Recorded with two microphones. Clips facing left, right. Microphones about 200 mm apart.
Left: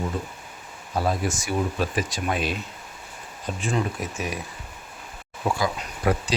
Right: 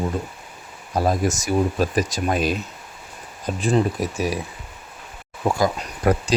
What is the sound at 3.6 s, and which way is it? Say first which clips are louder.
Speech: right 7 dB; 35° right (ahead or behind).